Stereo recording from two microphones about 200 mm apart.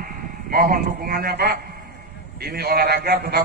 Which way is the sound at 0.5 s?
45° right (ahead or behind).